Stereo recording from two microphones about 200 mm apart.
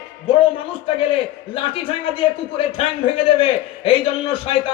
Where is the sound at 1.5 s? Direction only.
25° left (ahead or behind).